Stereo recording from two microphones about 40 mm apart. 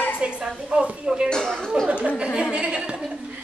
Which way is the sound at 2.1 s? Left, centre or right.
Centre.